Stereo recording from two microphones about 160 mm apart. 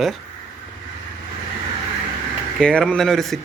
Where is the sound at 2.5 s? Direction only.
5° left (ahead or behind).